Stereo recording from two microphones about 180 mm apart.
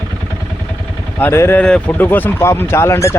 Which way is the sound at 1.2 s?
10° left (ahead or behind).